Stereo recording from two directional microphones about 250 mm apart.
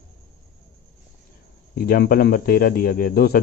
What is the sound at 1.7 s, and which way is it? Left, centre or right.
Speech, left.